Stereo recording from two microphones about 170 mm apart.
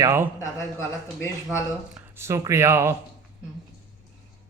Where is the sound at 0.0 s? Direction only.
15° right (ahead or behind).